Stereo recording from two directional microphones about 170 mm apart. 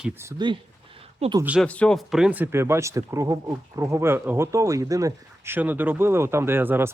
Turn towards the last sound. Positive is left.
turn(degrees=-15)  # may be behind; listen again after turning